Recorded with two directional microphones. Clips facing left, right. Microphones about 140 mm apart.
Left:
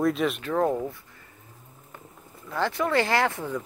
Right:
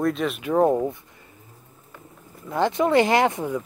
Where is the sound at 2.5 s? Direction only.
20° right (ahead or behind).